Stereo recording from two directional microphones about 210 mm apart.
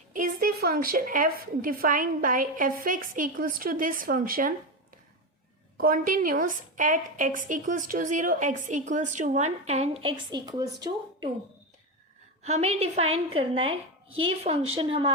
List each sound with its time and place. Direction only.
0.1 s a woman's voice: 40° right (ahead or behind)
5.7 s a woman's voice: 40° right (ahead or behind); by 11.3 s 20° right (ahead or behind)
12.4 s a woman's voice: 30° right (ahead or behind)